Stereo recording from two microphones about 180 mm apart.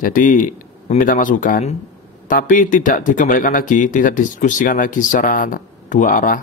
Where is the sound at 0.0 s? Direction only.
50° left (ahead or behind).